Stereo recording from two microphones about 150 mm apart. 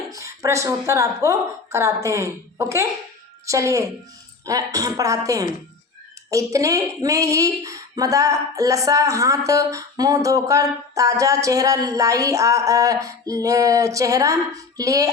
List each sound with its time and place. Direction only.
0.1 s speech: 20° right (ahead or behind)